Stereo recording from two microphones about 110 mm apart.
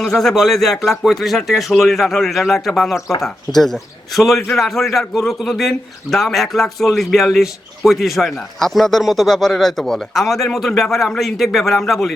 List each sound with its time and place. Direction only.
0.0 s a man's voice: 5° left (ahead or behind)